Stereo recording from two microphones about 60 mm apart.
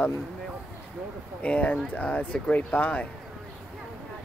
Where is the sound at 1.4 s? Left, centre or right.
Left.